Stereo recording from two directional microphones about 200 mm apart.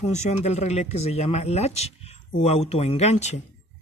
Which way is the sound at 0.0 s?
35° left (ahead or behind).